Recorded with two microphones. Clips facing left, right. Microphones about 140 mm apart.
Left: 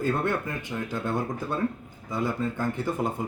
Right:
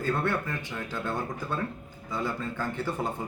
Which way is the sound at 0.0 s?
15° left (ahead or behind).